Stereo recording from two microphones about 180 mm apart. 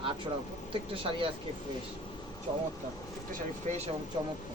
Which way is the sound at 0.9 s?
30° right (ahead or behind).